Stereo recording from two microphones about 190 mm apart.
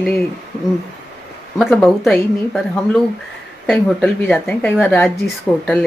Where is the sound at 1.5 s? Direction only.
Centre (ahead or behind).